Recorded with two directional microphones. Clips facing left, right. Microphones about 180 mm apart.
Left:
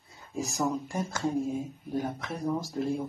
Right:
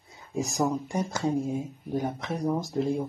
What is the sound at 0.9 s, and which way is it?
Speech, 20° right (ahead or behind).